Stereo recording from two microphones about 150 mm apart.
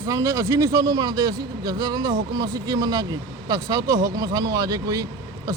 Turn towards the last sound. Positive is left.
turn(degrees=-25)  # may be behind; listen again after turning